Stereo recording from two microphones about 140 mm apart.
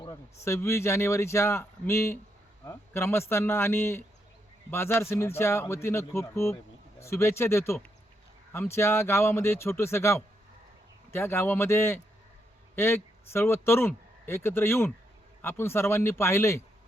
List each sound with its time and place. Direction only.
0.4 s a man's voice: 20° left (ahead or behind)